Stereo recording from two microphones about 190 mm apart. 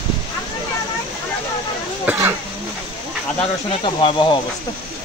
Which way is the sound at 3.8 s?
25° left (ahead or behind).